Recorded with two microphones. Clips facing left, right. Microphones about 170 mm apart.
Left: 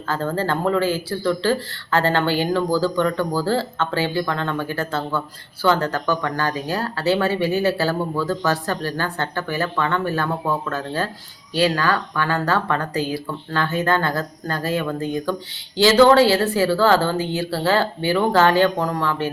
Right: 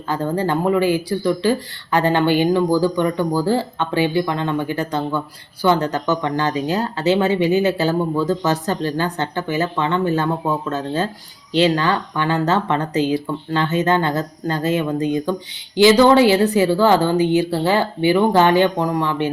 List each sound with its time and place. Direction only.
0.1 s speech: 15° right (ahead or behind)